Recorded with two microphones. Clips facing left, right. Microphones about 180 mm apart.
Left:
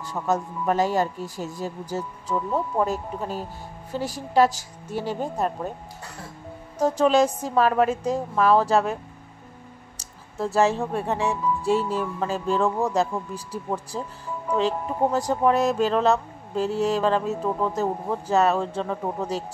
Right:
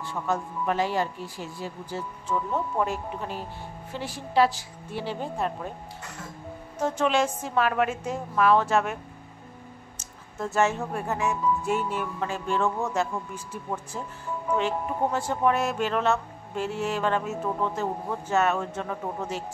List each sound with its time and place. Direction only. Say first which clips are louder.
0.0 s speech: left 4 dB; 40° left (ahead or behind)
6.8 s speech: left 5 dB; 35° left (ahead or behind)
9.9 s speech: left 5 dB; 35° left (ahead or behind)
15.1 s speech: left 4 dB; 35° left (ahead or behind)